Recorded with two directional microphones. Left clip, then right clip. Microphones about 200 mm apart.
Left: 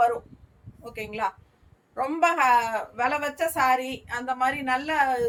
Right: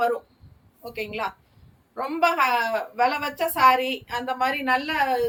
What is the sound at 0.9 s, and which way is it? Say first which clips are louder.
A woman's voice: even; 20° left (ahead or behind).